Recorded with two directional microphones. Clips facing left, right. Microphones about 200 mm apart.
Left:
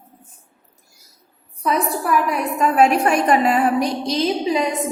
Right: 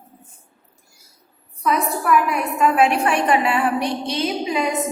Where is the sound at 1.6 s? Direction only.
35° left (ahead or behind).